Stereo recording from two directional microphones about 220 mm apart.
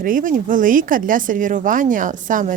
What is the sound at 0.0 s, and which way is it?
Speech, 40° right (ahead or behind).